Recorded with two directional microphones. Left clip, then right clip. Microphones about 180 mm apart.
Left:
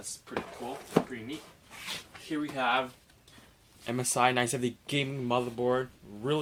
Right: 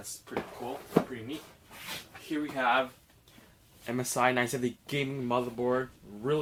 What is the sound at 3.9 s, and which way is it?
Speech, 30° left (ahead or behind).